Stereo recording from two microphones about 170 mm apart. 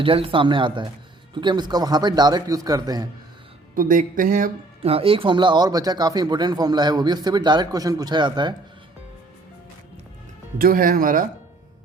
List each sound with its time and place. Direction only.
0.0 s speech: 30° right (ahead or behind)
3.8 s speech: 55° right (ahead or behind)
4.8 s speech: 35° right (ahead or behind)
10.6 s speech: 55° right (ahead or behind)